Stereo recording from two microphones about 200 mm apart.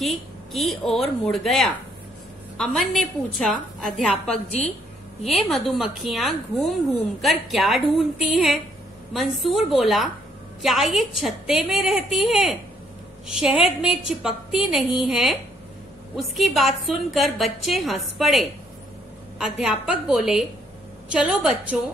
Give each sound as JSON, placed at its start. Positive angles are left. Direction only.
{"t": 0.0, "sound": "speech", "side_deg": 0}
{"t": 4.3, "sound": "a woman's voice", "side_deg": 30}
{"t": 5.2, "sound": "speech", "side_deg": 0}